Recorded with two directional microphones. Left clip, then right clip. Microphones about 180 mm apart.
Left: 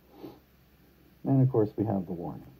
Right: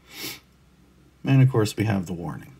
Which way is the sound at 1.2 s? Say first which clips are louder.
Right 3 dB; 15° right (ahead or behind).